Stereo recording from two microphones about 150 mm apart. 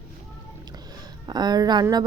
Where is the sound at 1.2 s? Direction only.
25° right (ahead or behind).